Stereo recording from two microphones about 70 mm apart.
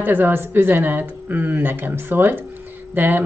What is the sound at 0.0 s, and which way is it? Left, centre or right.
Speech, right.